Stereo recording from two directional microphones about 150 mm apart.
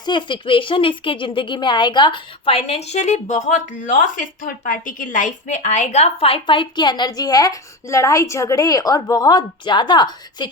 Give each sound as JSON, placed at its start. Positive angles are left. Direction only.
{"t": 0.0, "sound": "speech", "side_deg": 30}